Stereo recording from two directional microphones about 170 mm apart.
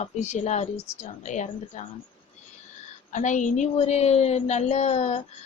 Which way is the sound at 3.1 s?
45° left (ahead or behind).